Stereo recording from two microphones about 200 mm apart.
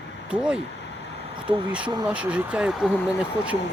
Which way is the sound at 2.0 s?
5° right (ahead or behind).